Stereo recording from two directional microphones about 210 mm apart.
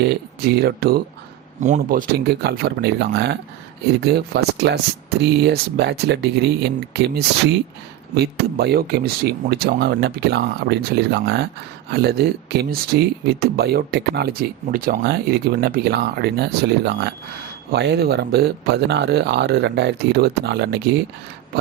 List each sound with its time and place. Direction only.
0.0 s speech: 50° right (ahead or behind)